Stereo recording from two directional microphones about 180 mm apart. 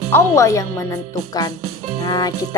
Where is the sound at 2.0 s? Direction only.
20° left (ahead or behind).